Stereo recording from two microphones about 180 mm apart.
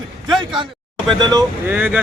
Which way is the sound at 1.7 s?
10° right (ahead or behind).